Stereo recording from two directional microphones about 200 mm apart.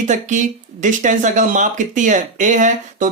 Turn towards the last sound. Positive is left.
turn(degrees=-40)  # may be behind; listen again after turning